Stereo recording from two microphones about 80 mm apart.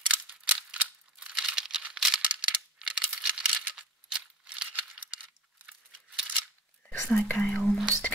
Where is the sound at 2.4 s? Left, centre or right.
Centre.